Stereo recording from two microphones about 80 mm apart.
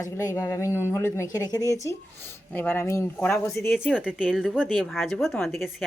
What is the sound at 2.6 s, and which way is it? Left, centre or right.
Speech, left.